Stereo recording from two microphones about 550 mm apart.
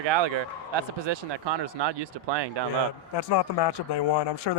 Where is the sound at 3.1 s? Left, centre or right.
Left.